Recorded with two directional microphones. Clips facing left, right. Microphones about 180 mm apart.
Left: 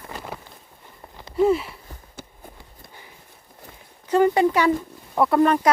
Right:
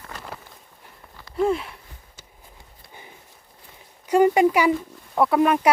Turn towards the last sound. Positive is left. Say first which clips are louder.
# left 1 dB
turn(degrees=-10)  # may be behind; listen again after turning